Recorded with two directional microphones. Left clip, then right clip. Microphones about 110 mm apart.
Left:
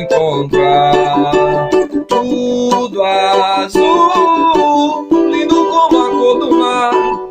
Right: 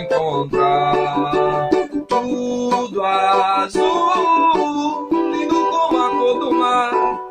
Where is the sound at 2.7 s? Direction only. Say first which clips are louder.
Left 4 dB; 15° left (ahead or behind).